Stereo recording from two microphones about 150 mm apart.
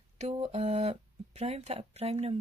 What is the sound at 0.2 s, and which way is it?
Speech, 45° right (ahead or behind).